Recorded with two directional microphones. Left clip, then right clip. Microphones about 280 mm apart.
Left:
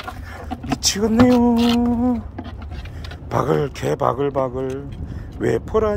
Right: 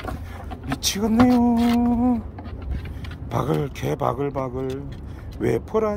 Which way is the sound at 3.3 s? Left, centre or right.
Centre.